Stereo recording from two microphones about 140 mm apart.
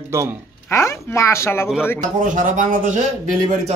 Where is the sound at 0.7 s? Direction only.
20° left (ahead or behind).